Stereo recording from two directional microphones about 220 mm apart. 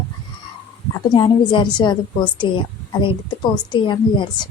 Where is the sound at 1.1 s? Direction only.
20° left (ahead or behind).